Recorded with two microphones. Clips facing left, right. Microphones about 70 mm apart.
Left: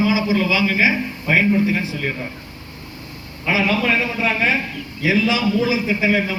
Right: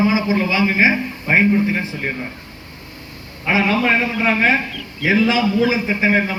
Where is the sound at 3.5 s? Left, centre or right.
Right.